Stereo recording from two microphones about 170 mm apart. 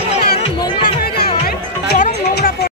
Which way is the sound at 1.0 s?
70° left (ahead or behind).